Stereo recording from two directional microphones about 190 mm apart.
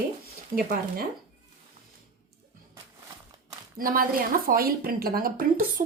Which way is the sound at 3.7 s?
50° right (ahead or behind).